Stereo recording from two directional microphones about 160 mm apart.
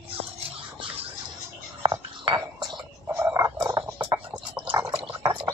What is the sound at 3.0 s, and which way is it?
Frog, 15° right (ahead or behind).